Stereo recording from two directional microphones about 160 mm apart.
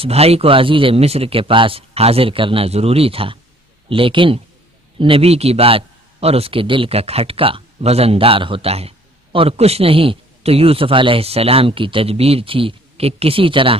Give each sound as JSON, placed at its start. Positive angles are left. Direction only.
{"t": 0.0, "sound": "a man's voice", "side_deg": -40}